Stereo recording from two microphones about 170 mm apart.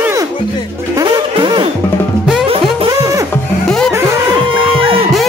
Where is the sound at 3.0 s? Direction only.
20° right (ahead or behind).